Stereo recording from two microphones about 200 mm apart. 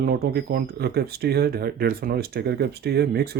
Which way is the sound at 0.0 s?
50° right (ahead or behind).